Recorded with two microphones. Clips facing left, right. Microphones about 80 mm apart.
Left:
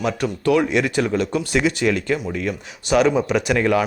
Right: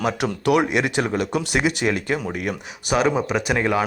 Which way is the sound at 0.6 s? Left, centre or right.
Centre.